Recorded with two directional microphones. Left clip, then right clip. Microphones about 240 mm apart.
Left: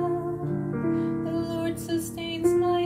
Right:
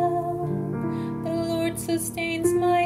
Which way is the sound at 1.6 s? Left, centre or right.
Right.